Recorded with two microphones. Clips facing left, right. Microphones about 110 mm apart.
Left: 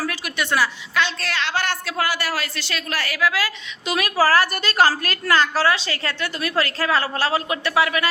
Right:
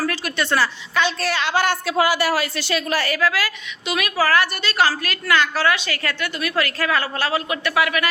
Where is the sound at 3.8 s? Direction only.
35° left (ahead or behind).